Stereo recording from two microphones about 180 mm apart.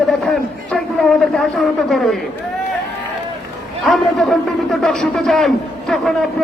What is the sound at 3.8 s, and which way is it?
A man's voice, centre (ahead or behind).